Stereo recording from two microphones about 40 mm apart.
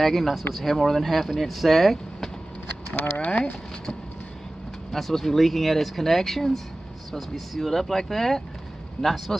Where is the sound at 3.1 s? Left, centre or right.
Left.